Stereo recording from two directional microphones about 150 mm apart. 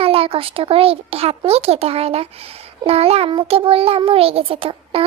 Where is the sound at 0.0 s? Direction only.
40° right (ahead or behind).